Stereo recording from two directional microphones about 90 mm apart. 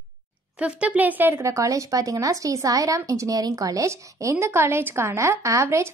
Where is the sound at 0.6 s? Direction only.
15° right (ahead or behind).